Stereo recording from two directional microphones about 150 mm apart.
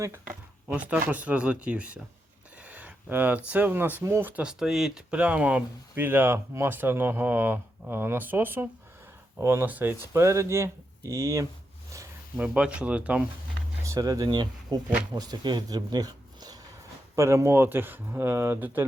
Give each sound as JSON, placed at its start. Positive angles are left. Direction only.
{"t": 0.7, "sound": "speech", "side_deg": -10}
{"t": 12.4, "sound": "speech", "side_deg": -5}
{"t": 13.8, "sound": "speech", "side_deg": -20}